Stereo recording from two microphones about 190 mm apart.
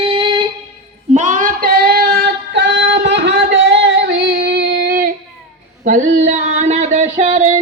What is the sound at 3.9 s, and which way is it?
Female singing, 60° right (ahead or behind).